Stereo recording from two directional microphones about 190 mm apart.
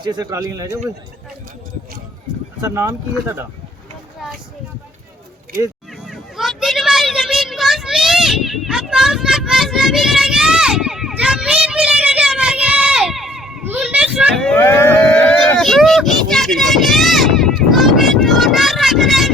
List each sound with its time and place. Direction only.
0.0 s speech: 20° right (ahead or behind)
2.6 s speech: 15° right (ahead or behind)
6.1 s a sound: centre (ahead or behind)